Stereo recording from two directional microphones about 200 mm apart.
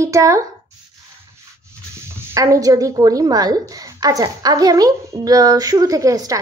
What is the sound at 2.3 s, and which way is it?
A woman's voice, 15° right (ahead or behind).